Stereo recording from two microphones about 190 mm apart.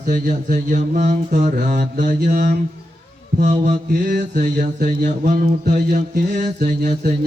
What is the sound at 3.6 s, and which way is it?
Mantra, 55° right (ahead or behind).